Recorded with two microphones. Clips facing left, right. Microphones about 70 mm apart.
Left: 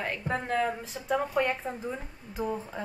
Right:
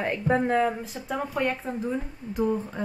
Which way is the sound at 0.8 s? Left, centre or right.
Centre.